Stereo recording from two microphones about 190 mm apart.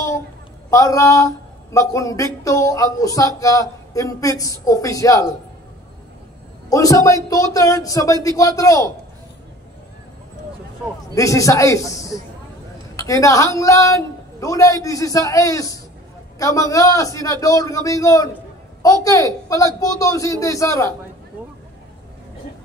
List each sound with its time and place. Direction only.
0.7 s speech: 15° left (ahead or behind)
6.7 s speech: 15° left (ahead or behind)
11.1 s speech: 15° left (ahead or behind)